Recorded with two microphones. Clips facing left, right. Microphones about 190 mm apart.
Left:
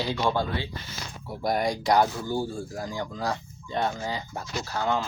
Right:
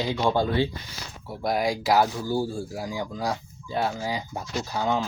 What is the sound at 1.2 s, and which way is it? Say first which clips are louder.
Speech: right 1 dB; centre (ahead or behind).